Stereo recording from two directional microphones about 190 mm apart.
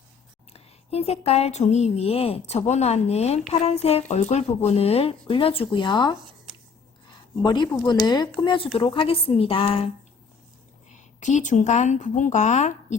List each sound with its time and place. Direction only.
0.5 s a woman's voice: 35° left (ahead or behind)
7.4 s speech: 25° left (ahead or behind)
11.2 s a woman's voice: 40° left (ahead or behind)